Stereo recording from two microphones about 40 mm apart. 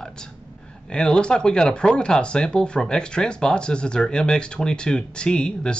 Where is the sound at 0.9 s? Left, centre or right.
Left.